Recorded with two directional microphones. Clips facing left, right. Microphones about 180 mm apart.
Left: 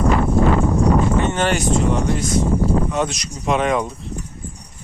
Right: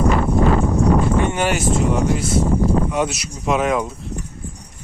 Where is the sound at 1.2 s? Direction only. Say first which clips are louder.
Even; 10° right (ahead or behind).